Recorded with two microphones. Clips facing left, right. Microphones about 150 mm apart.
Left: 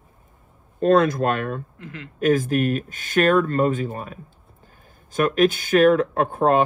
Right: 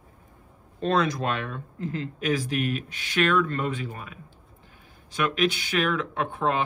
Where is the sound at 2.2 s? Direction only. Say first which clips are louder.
Left 8 dB; 50° left (ahead or behind).